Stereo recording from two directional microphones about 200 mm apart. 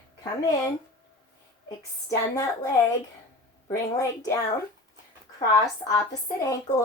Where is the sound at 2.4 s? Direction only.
20° left (ahead or behind).